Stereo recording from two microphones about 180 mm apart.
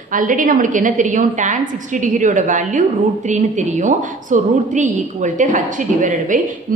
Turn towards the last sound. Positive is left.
turn(degrees=-45)  # may be behind; listen again after turning